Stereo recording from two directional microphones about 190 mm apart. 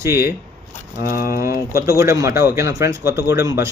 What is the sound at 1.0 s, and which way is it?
Speech, 50° left (ahead or behind).